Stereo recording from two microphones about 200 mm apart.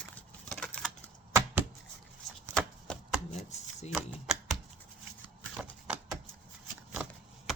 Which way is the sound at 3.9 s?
Centre (ahead or behind).